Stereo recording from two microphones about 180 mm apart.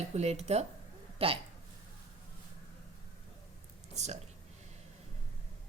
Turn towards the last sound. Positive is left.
turn(degrees=-40)  # may be behind; listen again after turning